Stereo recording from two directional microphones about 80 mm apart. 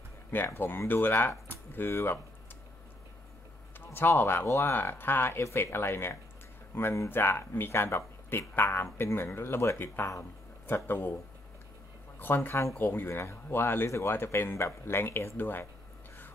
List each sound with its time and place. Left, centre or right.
0.6 s speech: left
3.9 s speech: left
12.2 s speech: left